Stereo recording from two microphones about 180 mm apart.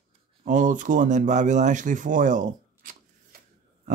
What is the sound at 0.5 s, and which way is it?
Speech, 45° right (ahead or behind).